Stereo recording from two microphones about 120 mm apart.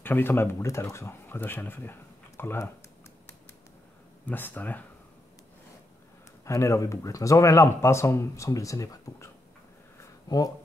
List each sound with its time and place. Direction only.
0.0 s speech: 15° left (ahead or behind)
4.3 s speech: 15° left (ahead or behind)
6.4 s speech: 25° left (ahead or behind)
9.9 s a sound: 30° left (ahead or behind)